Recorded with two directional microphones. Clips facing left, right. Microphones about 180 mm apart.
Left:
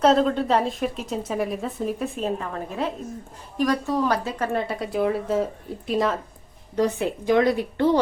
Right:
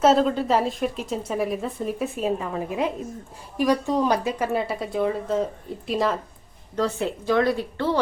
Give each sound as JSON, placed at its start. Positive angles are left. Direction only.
{"t": 0.0, "sound": "a woman's voice", "side_deg": -5}
{"t": 6.7, "sound": "a woman's voice", "side_deg": 15}